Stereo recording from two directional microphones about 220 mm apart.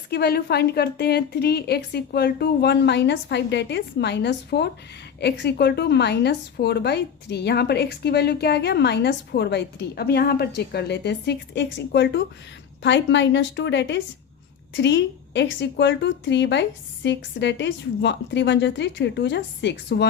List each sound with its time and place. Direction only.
0.1 s a woman's voice: 45° left (ahead or behind)